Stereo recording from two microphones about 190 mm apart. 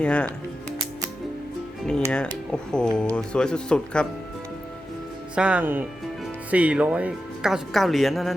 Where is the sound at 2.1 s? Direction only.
5° left (ahead or behind).